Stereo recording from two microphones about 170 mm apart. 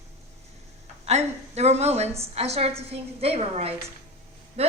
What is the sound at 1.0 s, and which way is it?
A woman's voice, 40° right (ahead or behind).